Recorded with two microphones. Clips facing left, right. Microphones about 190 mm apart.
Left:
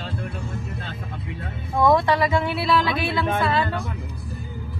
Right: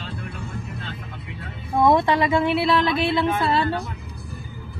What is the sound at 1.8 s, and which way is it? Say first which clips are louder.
Speech: even; 25° right (ahead or behind).